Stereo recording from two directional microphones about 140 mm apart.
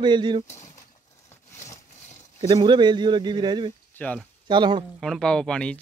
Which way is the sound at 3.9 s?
10° left (ahead or behind).